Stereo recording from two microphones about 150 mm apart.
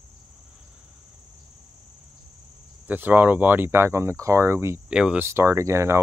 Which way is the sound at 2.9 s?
10° right (ahead or behind).